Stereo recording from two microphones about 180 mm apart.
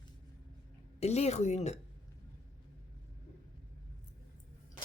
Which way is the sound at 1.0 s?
35° left (ahead or behind).